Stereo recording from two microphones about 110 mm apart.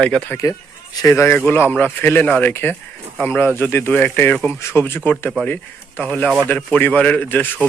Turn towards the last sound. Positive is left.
turn(degrees=15)  # may be behind; listen again after turning